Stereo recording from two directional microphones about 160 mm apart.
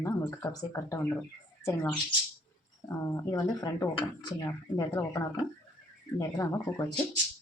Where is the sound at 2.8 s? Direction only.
20° left (ahead or behind).